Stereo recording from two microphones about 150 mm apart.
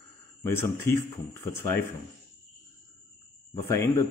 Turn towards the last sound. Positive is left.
turn(degrees=20)  # may be behind; listen again after turning